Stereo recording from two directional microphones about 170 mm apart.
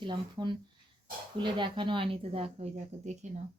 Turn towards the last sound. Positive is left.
turn(degrees=-45)  # may be behind; listen again after turning